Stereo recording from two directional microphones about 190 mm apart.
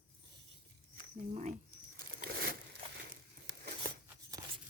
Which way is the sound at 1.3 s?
40° right (ahead or behind).